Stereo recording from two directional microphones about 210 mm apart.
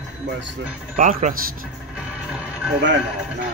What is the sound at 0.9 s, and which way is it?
Speech, 35° right (ahead or behind).